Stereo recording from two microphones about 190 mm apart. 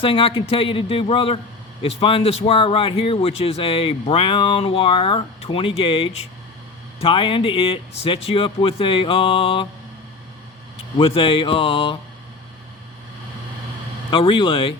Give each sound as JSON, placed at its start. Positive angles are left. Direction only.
{"t": 0.0, "sound": "speech", "side_deg": 30}
{"t": 10.9, "sound": "speech", "side_deg": 30}
{"t": 14.1, "sound": "speech", "side_deg": 25}